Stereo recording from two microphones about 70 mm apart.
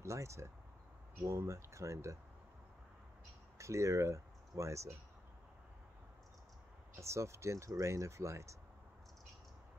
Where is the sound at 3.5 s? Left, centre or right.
Right.